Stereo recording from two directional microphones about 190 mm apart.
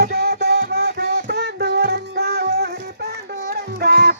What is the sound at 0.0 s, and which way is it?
Music, 55° right (ahead or behind).